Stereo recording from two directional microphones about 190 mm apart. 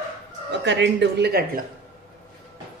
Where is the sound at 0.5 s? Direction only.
70° right (ahead or behind).